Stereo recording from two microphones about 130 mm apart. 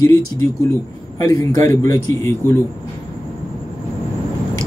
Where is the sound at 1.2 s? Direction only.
30° left (ahead or behind).